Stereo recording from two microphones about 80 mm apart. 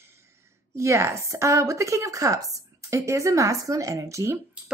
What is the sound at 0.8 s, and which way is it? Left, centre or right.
Speech, right.